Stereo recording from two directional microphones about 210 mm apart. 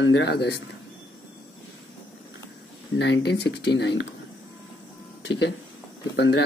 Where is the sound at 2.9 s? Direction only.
55° left (ahead or behind).